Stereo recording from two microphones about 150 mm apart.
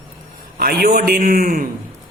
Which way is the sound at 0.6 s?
80° right.